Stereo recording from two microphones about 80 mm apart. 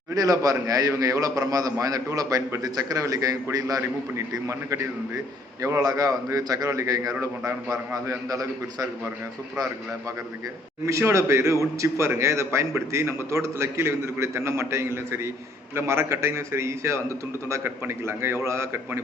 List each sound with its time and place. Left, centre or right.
0.1 s a man's voice: right
4.3 s speech: right
5.8 s a man's voice: right
10.8 s speech: right